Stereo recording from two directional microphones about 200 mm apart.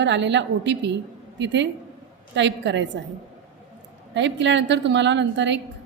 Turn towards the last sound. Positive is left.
turn(degrees=-65)  # may be behind; listen again after turning